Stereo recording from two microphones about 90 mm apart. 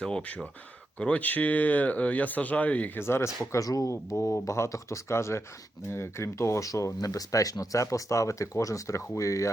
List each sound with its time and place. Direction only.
0.0 s speech: 10° left (ahead or behind); by 3.2 s 25° left (ahead or behind)
3.5 s speech: 40° left (ahead or behind)